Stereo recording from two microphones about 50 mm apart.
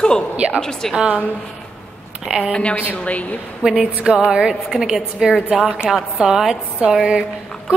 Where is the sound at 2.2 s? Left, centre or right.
Centre.